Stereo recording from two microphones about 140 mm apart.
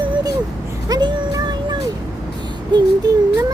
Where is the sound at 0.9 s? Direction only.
30° right (ahead or behind).